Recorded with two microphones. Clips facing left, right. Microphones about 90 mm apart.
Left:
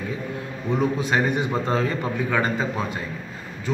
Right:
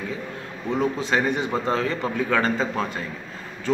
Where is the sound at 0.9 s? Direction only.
15° left (ahead or behind).